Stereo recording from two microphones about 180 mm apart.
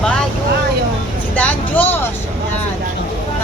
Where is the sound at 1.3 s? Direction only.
10° left (ahead or behind).